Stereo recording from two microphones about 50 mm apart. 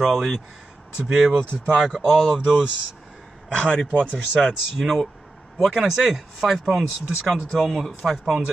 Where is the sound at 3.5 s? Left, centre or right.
Left.